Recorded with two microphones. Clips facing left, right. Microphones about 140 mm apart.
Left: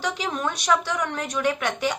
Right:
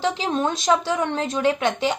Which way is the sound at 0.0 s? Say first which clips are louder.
Right 5 dB; 25° right (ahead or behind).